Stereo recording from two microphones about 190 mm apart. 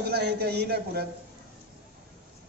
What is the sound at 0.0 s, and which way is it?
A man's voice, 60° right (ahead or behind).